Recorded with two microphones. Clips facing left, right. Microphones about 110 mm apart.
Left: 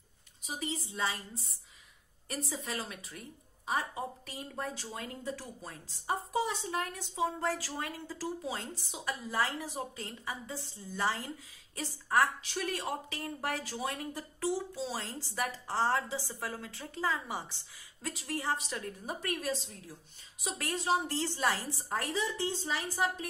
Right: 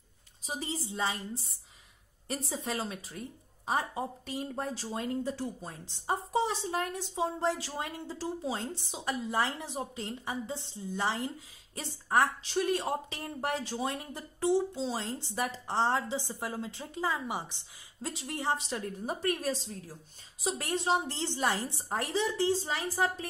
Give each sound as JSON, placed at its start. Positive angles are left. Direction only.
{"t": 0.5, "sound": "speech", "side_deg": -30}
{"t": 2.5, "sound": "speech", "side_deg": -30}